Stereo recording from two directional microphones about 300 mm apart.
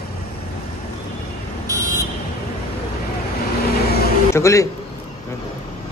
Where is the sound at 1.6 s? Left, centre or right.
Centre.